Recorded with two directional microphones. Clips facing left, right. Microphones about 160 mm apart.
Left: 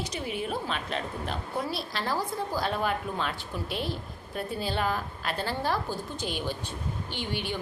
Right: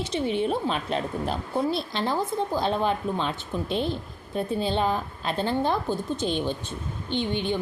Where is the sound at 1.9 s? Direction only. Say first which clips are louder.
Right 4 dB; 25° right (ahead or behind).